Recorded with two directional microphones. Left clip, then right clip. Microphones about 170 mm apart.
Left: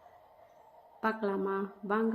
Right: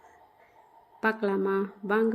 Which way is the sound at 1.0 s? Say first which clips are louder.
Right 5 dB; 20° right (ahead or behind).